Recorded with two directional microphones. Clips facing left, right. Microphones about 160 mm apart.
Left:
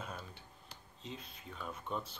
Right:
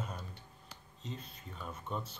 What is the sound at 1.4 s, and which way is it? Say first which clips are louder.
Speech: even; centre (ahead or behind).